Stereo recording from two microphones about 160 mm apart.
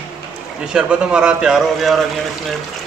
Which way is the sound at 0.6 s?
5° right (ahead or behind).